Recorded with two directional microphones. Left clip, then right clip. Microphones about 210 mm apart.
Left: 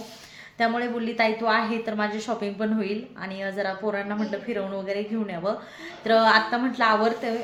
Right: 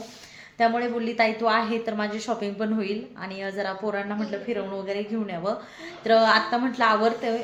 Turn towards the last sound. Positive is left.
turn(degrees=-5)  # may be behind; listen again after turning